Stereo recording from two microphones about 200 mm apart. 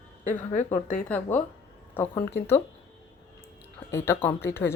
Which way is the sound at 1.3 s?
10° left (ahead or behind).